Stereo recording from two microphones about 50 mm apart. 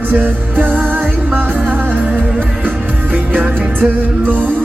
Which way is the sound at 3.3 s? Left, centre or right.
Right.